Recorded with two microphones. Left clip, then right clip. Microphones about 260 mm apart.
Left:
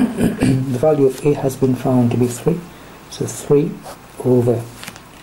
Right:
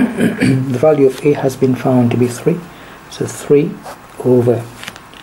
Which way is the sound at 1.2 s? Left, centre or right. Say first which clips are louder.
Right 4 dB; right.